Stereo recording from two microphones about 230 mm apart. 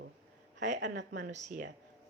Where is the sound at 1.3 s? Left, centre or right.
Right.